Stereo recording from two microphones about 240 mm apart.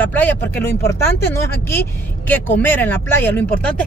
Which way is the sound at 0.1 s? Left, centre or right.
Centre.